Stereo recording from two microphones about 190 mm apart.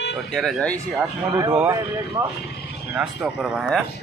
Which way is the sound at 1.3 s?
20° right (ahead or behind).